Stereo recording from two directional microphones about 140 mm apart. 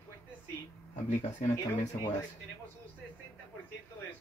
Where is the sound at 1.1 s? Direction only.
55° left (ahead or behind).